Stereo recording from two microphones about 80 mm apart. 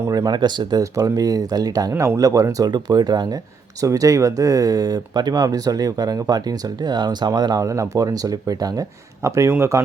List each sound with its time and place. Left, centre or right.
0.1 s speech: right
0.8 s speech: right
1.9 s speech: right
3.8 s speech: right
7.3 s speech: right
9.2 s speech: right